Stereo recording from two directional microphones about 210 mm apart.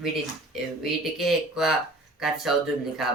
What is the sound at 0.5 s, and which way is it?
Speech, centre (ahead or behind).